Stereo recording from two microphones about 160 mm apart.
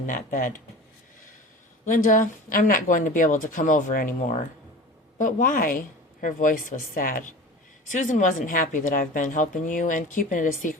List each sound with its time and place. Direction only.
0.1 s speech: 60° left (ahead or behind)
1.8 s speech: 55° left (ahead or behind)